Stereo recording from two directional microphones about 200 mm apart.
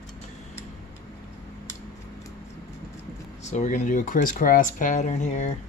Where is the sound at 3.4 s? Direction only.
40° left (ahead or behind).